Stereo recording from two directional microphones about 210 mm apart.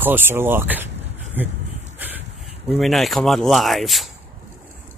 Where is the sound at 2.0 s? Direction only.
10° right (ahead or behind).